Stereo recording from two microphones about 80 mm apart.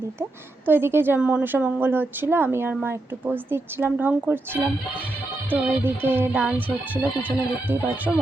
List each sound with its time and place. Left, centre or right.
0.2 s speech: right; by 8.2 s centre